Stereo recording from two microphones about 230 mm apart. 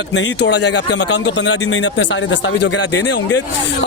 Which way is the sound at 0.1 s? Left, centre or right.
Left.